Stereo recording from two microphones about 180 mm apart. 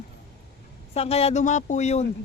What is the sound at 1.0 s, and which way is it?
Speech, 35° left (ahead or behind).